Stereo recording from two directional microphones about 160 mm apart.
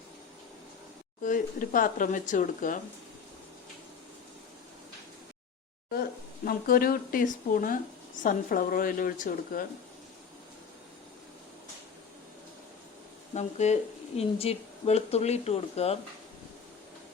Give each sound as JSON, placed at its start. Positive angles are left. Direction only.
{"t": 1.2, "sound": "speech", "side_deg": 55}
{"t": 6.4, "sound": "speech", "side_deg": 65}
{"t": 13.3, "sound": "speech", "side_deg": 45}